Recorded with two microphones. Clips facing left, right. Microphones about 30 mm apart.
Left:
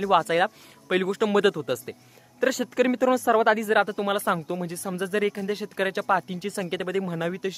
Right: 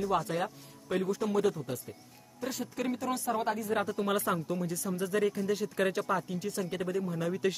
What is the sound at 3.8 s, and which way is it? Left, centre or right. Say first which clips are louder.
Speech: left 5 dB; left.